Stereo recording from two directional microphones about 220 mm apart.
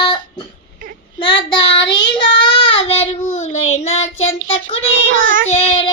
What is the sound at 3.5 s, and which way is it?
Child singing, 65° left (ahead or behind).